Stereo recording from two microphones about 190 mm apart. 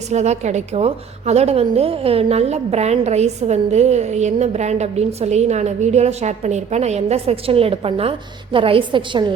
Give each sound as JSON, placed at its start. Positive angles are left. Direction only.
{"t": 0.1, "sound": "a woman's voice", "side_deg": -35}